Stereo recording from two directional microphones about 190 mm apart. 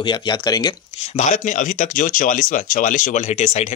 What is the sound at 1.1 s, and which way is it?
Speech, 40° left (ahead or behind).